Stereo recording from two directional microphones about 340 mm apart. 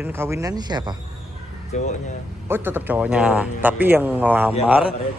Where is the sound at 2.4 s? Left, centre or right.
Centre.